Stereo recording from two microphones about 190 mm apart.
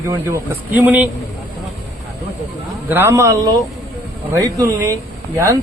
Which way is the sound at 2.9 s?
15° right (ahead or behind).